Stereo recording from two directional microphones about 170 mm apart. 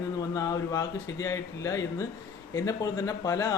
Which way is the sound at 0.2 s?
20° left (ahead or behind).